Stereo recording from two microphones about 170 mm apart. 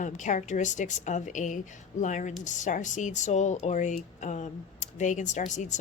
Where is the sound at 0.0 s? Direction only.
45° left (ahead or behind).